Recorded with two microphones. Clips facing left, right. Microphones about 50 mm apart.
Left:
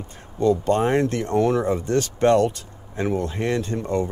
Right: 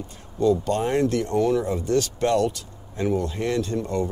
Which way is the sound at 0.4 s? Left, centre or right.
Left.